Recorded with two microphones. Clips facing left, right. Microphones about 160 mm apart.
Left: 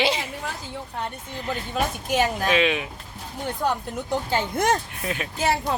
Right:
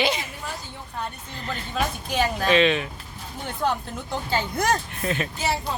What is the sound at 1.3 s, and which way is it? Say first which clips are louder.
Speech: left 2 dB; 10° left (ahead or behind).